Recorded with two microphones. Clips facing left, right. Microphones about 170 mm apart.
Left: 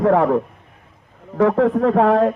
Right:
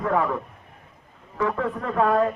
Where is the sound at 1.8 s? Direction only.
65° left (ahead or behind).